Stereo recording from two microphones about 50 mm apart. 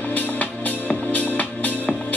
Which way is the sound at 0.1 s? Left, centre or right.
Left.